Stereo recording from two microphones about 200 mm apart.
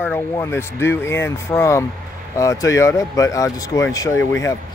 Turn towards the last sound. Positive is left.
turn(degrees=15)  # may be behind; listen again after turning